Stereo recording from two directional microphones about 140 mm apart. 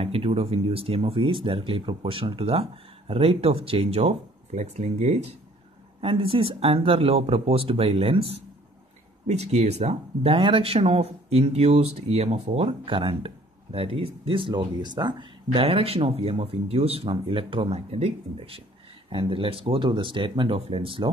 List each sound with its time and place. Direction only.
0.0 s speech: 45° right (ahead or behind)
5.9 s speech: 40° right (ahead or behind)